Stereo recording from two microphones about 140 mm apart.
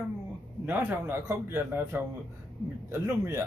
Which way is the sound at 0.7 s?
15° right (ahead or behind).